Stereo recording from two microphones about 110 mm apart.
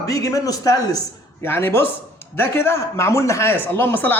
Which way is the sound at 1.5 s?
20° left (ahead or behind).